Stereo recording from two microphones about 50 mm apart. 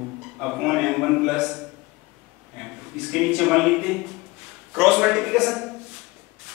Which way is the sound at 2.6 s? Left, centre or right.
Centre.